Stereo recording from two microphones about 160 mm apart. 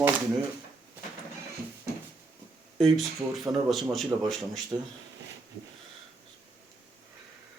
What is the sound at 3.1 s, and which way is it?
Speech, 20° right (ahead or behind).